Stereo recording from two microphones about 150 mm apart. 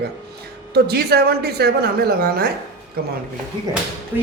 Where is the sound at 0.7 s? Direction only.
90° right.